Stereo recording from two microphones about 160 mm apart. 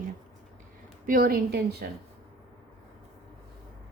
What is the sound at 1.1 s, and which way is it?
Speech, 65° right (ahead or behind).